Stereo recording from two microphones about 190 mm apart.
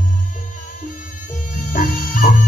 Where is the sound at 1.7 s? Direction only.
45° left (ahead or behind).